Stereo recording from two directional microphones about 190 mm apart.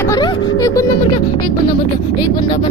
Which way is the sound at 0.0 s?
20° left (ahead or behind).